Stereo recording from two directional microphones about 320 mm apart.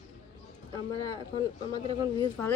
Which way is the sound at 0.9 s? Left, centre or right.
Centre.